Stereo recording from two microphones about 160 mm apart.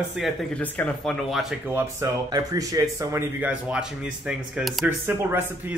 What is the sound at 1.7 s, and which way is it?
Speech, 20° right (ahead or behind).